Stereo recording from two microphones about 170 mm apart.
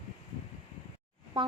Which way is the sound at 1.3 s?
30° right (ahead or behind).